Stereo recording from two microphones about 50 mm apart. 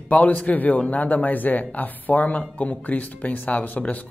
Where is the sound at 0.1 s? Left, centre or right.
Left.